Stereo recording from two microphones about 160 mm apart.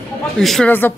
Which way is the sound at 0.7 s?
10° left (ahead or behind).